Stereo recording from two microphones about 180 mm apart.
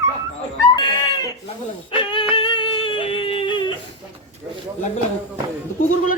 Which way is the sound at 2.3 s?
30° left (ahead or behind).